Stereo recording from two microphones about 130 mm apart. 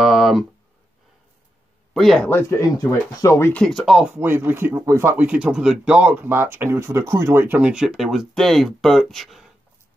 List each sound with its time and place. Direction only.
0.0 s a sound: centre (ahead or behind)
2.0 s speech: centre (ahead or behind)
2.2 s speech: 15° left (ahead or behind)
3.6 s speech: centre (ahead or behind)
4.1 s speech: 15° right (ahead or behind); by 9.5 s centre (ahead or behind)